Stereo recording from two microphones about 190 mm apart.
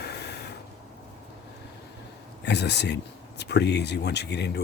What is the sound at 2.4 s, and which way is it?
Speech, 65° left (ahead or behind).